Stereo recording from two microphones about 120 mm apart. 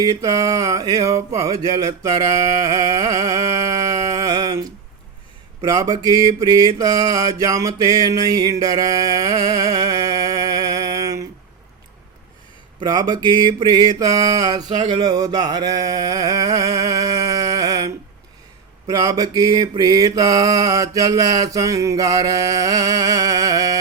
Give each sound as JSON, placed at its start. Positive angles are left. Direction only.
{"t": 0.0, "sound": "mantra", "side_deg": -30}
{"t": 12.8, "sound": "mantra", "side_deg": -35}
{"t": 13.2, "sound": "mantra", "side_deg": 45}
{"t": 13.6, "sound": "a sound", "side_deg": -35}
{"t": 18.9, "sound": "mantra", "side_deg": -30}